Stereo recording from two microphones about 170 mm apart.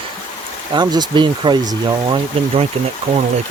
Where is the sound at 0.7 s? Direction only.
25° right (ahead or behind).